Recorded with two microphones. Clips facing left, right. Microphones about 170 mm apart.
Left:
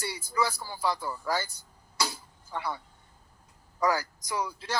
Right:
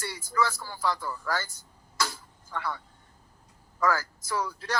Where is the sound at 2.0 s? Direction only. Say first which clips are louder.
Right 1 dB; 15° left (ahead or behind).